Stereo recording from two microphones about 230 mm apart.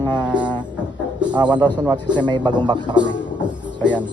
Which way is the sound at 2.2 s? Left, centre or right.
Centre.